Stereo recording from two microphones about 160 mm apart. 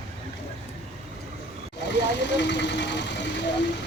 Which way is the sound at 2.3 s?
90° left.